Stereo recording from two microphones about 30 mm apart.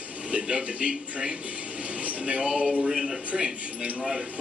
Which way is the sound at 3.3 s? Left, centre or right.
Right.